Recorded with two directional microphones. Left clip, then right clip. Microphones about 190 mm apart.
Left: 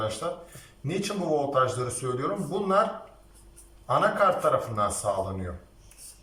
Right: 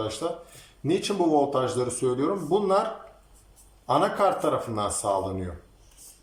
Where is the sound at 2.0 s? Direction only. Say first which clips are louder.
Right 6 dB; 25° right (ahead or behind).